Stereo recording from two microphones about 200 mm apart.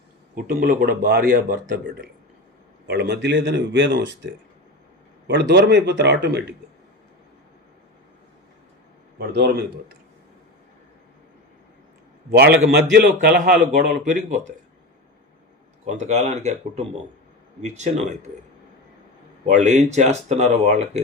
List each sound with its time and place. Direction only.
0.3 s speech: 45° right (ahead or behind)
2.8 s speech: 55° right (ahead or behind)
5.3 s speech: 60° right (ahead or behind)
9.1 s speech: 55° right (ahead or behind)
12.3 s speech: 55° right (ahead or behind)
13.1 s speech: 40° right (ahead or behind)
15.9 s speech: 35° right (ahead or behind)
19.5 s speech: 35° right (ahead or behind)